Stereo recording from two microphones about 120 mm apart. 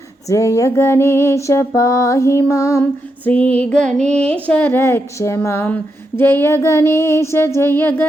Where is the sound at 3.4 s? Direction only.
60° right (ahead or behind).